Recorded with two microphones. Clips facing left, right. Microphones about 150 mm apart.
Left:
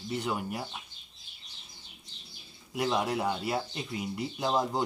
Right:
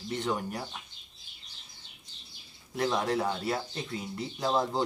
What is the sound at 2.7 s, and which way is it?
Speech, 10° left (ahead or behind).